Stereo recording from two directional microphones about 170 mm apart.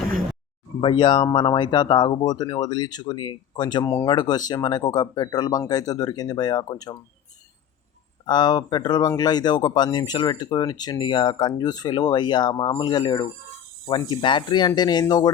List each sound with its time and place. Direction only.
0.8 s speech: 30° left (ahead or behind)
8.3 s speech: 25° left (ahead or behind)